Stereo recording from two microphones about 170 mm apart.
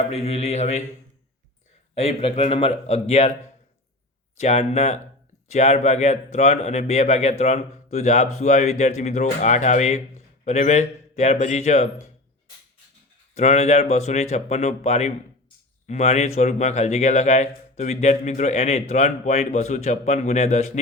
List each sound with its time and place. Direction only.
0.1 s speech: 35° left (ahead or behind)
2.0 s speech: 35° left (ahead or behind)
4.4 s speech: 40° left (ahead or behind)
13.3 s speech: 40° left (ahead or behind)